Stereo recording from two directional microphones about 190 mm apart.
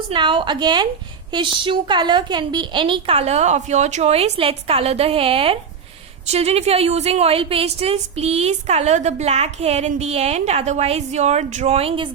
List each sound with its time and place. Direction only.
0.1 s a woman's voice: 25° right (ahead or behind)